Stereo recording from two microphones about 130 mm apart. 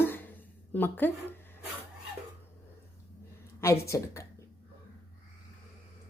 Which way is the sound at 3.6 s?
20° left (ahead or behind).